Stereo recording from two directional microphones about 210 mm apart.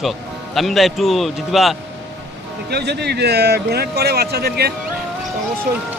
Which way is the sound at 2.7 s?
50° right (ahead or behind).